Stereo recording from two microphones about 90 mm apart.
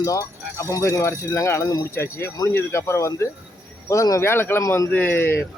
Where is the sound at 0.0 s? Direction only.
35° left (ahead or behind).